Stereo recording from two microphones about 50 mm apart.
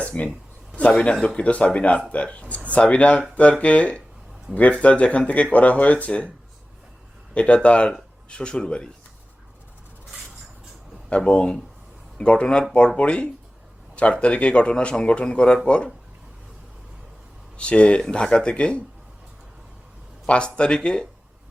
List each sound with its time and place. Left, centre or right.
0.0 s speech: left
7.3 s speech: left
11.3 s speech: left
17.6 s speech: left
20.2 s speech: left